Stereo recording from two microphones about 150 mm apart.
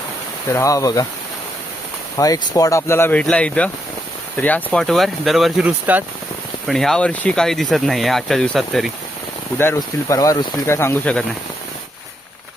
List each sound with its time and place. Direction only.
0.5 s speech: 20° left (ahead or behind)
2.1 s speech: 25° left (ahead or behind); by 6.0 s 10° right (ahead or behind)
6.7 s speech: 5° left (ahead or behind)
9.6 s speech: 20° left (ahead or behind)